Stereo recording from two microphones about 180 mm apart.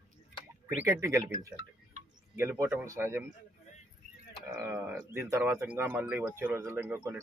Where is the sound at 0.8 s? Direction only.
15° right (ahead or behind).